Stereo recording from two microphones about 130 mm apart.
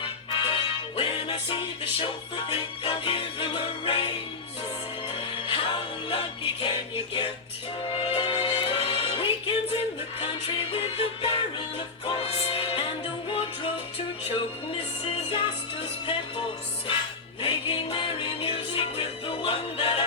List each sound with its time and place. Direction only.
0.0 s music: 45° left (ahead or behind)
5.1 s music: 45° left (ahead or behind)